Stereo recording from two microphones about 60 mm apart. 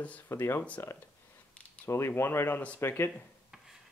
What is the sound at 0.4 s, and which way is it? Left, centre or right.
Speech, left.